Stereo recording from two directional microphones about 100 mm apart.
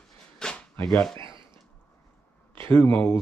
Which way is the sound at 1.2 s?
55° right (ahead or behind).